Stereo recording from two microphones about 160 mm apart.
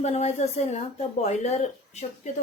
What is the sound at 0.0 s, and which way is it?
Speech, 45° left (ahead or behind).